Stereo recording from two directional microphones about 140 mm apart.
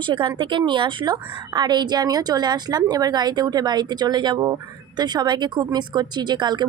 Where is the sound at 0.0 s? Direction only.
35° right (ahead or behind).